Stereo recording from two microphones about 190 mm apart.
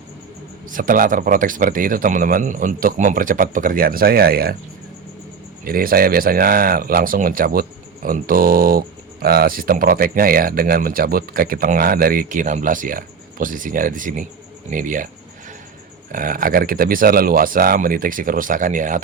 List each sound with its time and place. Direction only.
0.7 s speech: 45° right (ahead or behind)
5.6 s speech: 50° right (ahead or behind)
16.1 s speech: 45° right (ahead or behind)